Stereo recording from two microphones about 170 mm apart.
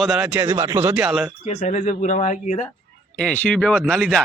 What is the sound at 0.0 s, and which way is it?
Speech, centre (ahead or behind).